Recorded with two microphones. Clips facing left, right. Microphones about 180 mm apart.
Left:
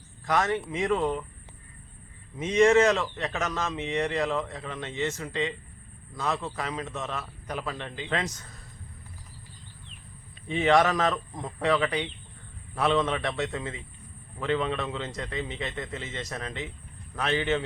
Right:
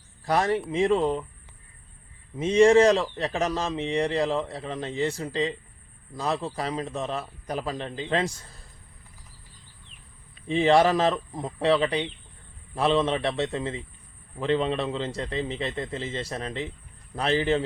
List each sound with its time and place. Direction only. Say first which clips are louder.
0.3 s a man's voice: right 2 dB; 35° right (ahead or behind)
2.4 s a man's voice: right 3 dB; 30° right (ahead or behind)
10.4 s a man's voice: right 3 dB; 30° right (ahead or behind)